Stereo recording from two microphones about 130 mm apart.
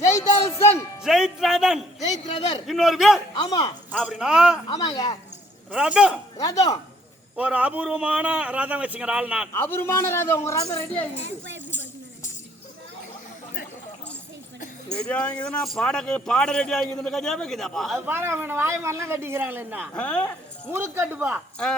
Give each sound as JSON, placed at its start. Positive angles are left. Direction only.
{"t": 0.0, "sound": "music", "side_deg": 25}
{"t": 1.0, "sound": "speech", "side_deg": -5}
{"t": 3.3, "sound": "speech", "side_deg": 30}
{"t": 4.0, "sound": "speech", "side_deg": -5}
{"t": 4.7, "sound": "a man's voice", "side_deg": 30}
{"t": 5.7, "sound": "a man's voice", "side_deg": -5}
{"t": 6.4, "sound": "a man's voice", "side_deg": 30}
{"t": 7.3, "sound": "a man's voice", "side_deg": -10}
{"t": 9.6, "sound": "a man's voice", "side_deg": 20}
{"t": 14.8, "sound": "speech", "side_deg": 5}
{"t": 18.0, "sound": "speech", "side_deg": -20}
{"t": 19.9, "sound": "a woman's voice", "side_deg": 10}
{"t": 20.7, "sound": "a man's voice", "side_deg": -20}